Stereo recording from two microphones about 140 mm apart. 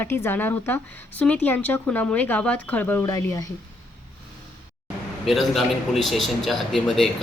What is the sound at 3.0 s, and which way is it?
Speech, 25° left (ahead or behind).